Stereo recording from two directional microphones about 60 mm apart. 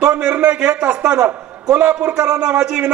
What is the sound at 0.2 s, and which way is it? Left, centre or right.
A man's voice, right.